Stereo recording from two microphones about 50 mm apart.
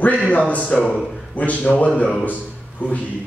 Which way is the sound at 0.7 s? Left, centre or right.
Centre.